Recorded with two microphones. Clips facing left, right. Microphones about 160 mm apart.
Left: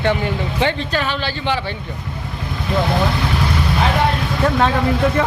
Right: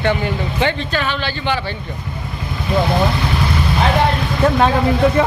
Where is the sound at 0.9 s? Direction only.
35° left (ahead or behind).